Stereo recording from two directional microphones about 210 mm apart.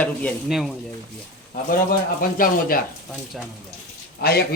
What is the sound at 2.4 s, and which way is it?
Speech, 45° left (ahead or behind).